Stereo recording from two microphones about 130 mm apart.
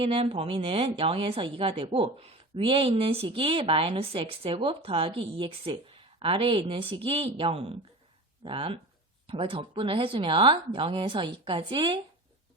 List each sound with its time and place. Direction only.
0.0 s speech: 45° right (ahead or behind)